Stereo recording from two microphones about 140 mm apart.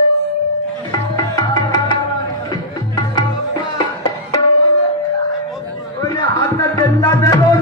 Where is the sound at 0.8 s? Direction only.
25° left (ahead or behind).